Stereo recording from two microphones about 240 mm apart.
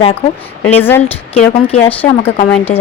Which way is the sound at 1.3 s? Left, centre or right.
Left.